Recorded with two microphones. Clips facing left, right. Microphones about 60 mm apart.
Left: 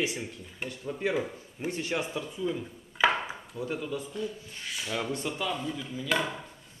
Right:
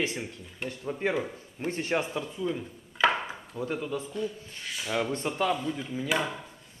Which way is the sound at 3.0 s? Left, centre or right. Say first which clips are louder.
Even; centre.